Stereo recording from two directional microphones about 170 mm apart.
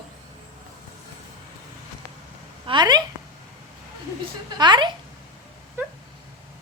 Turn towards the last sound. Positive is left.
turn(degrees=-10)  # may be behind; listen again after turning